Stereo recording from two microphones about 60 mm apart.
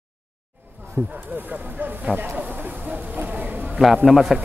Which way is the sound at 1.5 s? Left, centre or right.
Right.